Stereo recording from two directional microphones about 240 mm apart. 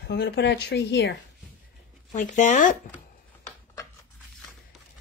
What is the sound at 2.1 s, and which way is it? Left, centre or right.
Speech, left.